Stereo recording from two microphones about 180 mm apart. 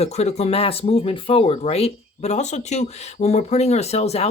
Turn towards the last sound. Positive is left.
turn(degrees=35)  # may be behind; listen again after turning